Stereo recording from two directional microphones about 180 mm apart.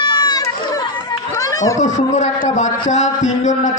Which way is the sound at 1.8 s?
40° left (ahead or behind).